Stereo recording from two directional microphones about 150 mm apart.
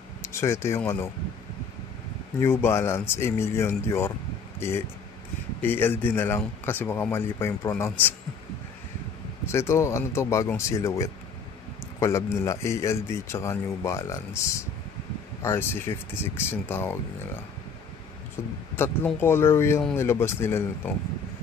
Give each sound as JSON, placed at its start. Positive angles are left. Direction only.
{"t": 0.2, "sound": "speech", "side_deg": 20}
{"t": 2.4, "sound": "speech", "side_deg": 15}
{"t": 9.5, "sound": "speech", "side_deg": 20}
{"t": 18.8, "sound": "speech", "side_deg": 15}